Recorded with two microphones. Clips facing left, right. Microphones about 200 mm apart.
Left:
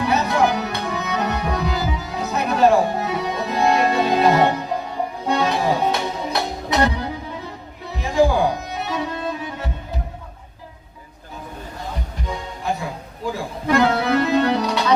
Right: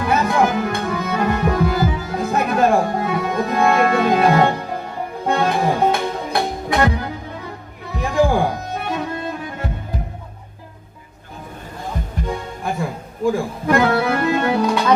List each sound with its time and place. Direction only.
0.0 s music: 50° right (ahead or behind)
12.6 s music: 50° right (ahead or behind)